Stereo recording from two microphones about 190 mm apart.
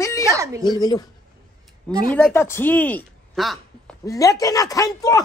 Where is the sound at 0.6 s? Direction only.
20° left (ahead or behind).